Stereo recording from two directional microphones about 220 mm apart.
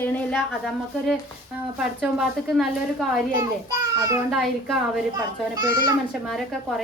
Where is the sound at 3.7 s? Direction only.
15° right (ahead or behind).